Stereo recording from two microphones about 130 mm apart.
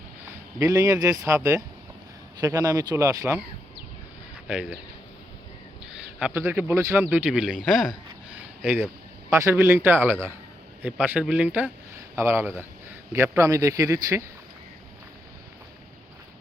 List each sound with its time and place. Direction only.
0.6 s speech: 25° right (ahead or behind)
4.4 s a man's voice: 10° right (ahead or behind)
5.8 s a sound: 5° right (ahead or behind)
6.3 s a man's voice: 15° right (ahead or behind)
7.6 s a sound: centre (ahead or behind)
9.3 s a man's voice: 20° right (ahead or behind)